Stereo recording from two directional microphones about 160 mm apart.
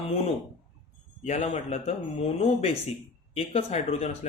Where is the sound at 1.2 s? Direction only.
45° left (ahead or behind).